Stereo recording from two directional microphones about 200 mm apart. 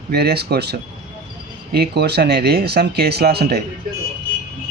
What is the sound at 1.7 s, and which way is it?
Speech, 55° right (ahead or behind).